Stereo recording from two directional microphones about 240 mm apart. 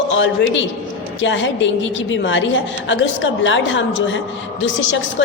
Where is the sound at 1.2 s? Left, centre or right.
Left.